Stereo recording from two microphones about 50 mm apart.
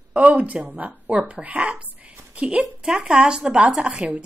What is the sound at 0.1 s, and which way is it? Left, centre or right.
A woman's voice, right.